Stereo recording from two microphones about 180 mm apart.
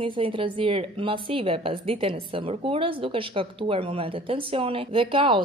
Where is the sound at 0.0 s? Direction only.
30° right (ahead or behind).